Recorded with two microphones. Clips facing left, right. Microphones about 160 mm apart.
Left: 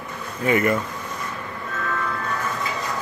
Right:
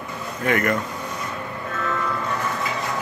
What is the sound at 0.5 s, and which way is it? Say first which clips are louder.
Speech: left 2 dB; 5° left (ahead or behind).